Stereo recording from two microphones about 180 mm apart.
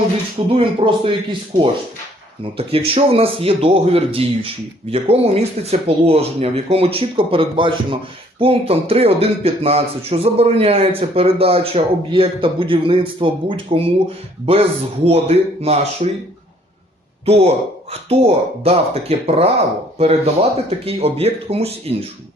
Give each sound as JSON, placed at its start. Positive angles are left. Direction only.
{"t": 0.5, "sound": "a man's voice", "side_deg": -30}
{"t": 15.0, "sound": "a man's voice", "side_deg": -35}
{"t": 17.2, "sound": "a man's voice", "side_deg": -35}